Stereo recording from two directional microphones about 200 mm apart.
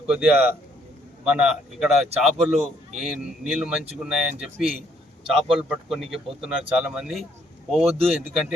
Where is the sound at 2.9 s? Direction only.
Centre (ahead or behind).